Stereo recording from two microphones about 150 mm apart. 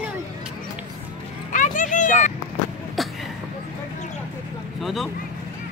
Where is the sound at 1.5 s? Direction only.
60° left (ahead or behind).